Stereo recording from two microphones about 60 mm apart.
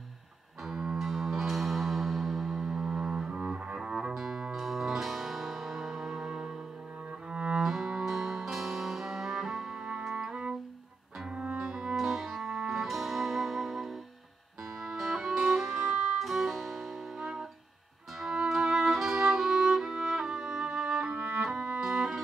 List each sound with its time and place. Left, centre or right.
0.7 s music: centre; by 11.6 s right
11.6 s music: centre